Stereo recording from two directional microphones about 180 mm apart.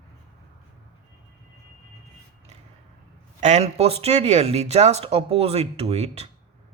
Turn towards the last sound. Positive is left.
turn(degrees=-35)  # may be behind; listen again after turning